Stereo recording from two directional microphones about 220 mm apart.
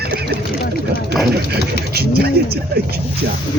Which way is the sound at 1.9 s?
45° right (ahead or behind).